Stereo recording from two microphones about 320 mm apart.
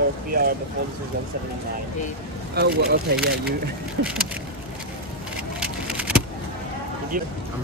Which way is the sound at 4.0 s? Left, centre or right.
Right.